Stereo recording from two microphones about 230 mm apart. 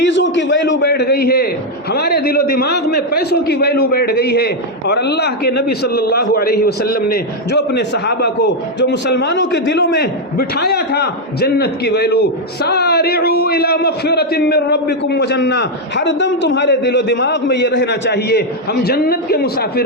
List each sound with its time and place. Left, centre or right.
0.0 s a man's voice: left